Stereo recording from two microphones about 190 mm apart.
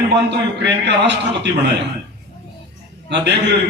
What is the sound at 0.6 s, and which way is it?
Speech, 65° right (ahead or behind).